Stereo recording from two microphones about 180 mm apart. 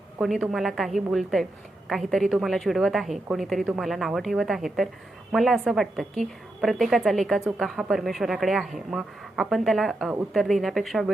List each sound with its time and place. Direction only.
0.2 s a woman's voice: centre (ahead or behind)